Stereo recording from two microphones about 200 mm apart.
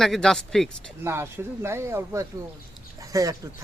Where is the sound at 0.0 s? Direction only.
Centre (ahead or behind).